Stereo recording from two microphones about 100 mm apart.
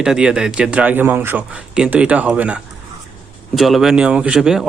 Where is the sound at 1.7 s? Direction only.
10° right (ahead or behind).